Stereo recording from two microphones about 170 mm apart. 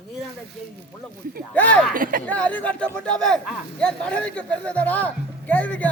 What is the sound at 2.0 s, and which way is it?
Speech, 55° right (ahead or behind).